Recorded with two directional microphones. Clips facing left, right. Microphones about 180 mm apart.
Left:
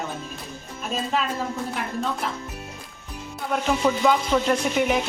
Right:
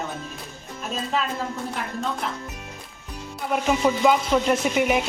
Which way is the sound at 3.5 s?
5° right (ahead or behind).